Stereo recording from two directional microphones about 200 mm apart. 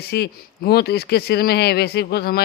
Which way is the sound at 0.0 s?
55° left (ahead or behind).